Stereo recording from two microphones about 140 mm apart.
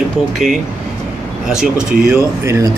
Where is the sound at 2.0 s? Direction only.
20° right (ahead or behind).